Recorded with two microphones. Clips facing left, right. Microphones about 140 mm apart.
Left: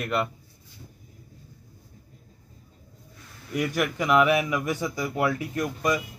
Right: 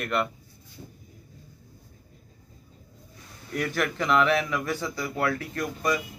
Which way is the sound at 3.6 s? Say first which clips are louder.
Left 2 dB; 10° left (ahead or behind).